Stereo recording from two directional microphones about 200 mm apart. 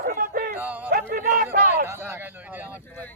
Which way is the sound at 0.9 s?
45° right (ahead or behind).